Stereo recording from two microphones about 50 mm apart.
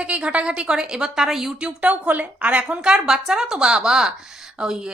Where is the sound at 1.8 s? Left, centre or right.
Right.